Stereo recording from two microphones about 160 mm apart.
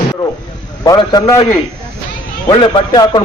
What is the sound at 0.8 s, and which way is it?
Speech, 25° left (ahead or behind).